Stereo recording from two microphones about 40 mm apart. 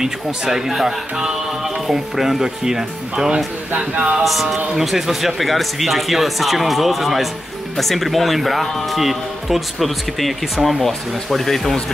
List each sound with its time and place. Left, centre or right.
0.0 s speech: centre
3.7 s speech: right
4.2 s speech: centre